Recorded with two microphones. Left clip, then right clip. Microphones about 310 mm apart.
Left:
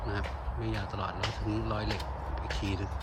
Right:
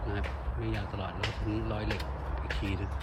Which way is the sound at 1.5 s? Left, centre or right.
Centre.